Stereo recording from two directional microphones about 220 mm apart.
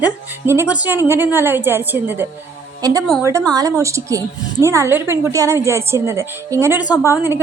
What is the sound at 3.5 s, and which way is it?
A woman's voice, 15° right (ahead or behind).